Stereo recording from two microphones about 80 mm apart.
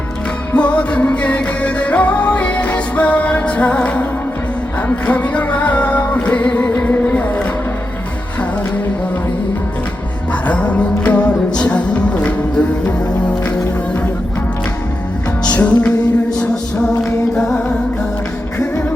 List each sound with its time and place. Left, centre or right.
0.5 s music: centre
5.0 s music: centre
10.4 s music: centre
15.5 s music: centre
17.3 s music: centre